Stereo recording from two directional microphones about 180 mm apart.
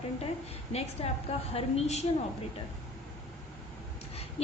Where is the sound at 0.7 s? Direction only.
35° left (ahead or behind).